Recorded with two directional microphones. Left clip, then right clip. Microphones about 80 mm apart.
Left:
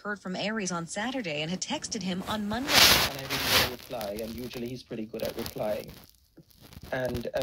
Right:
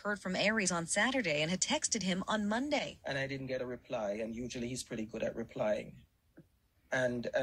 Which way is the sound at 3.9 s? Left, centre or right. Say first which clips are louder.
Left 2 dB; left.